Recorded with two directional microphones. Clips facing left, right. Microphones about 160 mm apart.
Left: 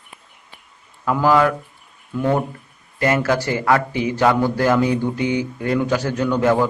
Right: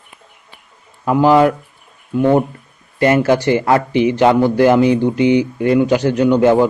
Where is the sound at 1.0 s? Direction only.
20° right (ahead or behind).